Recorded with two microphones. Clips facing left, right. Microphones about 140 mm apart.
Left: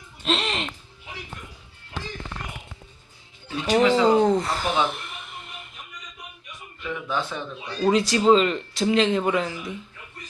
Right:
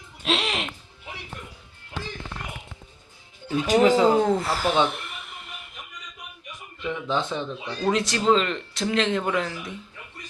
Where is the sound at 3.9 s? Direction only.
5° right (ahead or behind).